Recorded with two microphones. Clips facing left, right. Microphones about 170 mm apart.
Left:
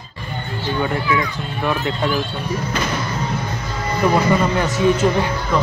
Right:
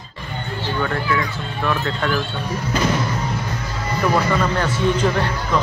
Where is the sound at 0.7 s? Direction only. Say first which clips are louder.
Left 2 dB; 15° left (ahead or behind).